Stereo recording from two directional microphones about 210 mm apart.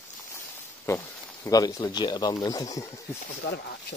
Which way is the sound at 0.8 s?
15° left (ahead or behind).